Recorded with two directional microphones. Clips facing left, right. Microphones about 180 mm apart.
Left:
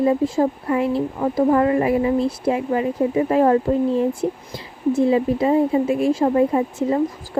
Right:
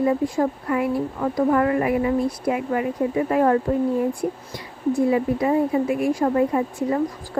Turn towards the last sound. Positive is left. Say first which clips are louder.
# left 2 dB
turn(degrees=25)  # may be behind; listen again after turning